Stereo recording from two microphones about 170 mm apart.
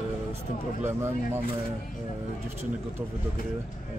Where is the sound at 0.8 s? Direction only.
15° right (ahead or behind).